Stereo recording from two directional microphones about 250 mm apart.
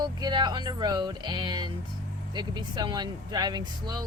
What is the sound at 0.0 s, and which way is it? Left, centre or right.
Speech, centre.